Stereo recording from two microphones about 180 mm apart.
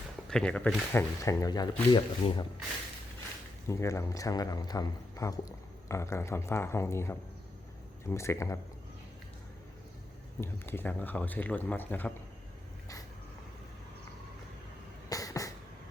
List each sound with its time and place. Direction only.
0.3 s speech: 5° left (ahead or behind); by 2.5 s 25° left (ahead or behind)
3.7 s speech: 15° left (ahead or behind)
10.4 s speech: 10° left (ahead or behind)
15.1 s a sound: 20° left (ahead or behind)